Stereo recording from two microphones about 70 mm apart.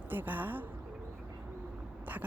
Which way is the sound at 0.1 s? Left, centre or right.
Right.